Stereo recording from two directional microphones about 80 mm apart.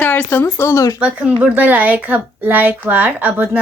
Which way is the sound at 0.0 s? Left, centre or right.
Left.